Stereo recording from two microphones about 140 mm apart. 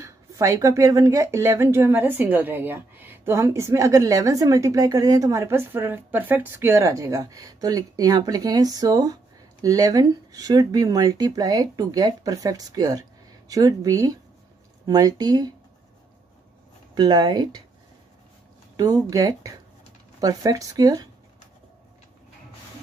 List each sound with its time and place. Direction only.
0.0 s speech: 20° right (ahead or behind)
16.9 s speech: 30° right (ahead or behind)
18.8 s speech: 25° right (ahead or behind)